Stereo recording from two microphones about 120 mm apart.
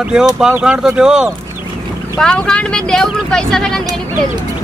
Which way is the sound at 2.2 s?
5° left (ahead or behind).